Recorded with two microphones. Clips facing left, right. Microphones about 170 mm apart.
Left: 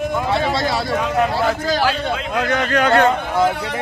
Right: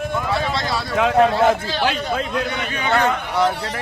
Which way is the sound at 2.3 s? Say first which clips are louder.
Left 5 dB; 75° left (ahead or behind).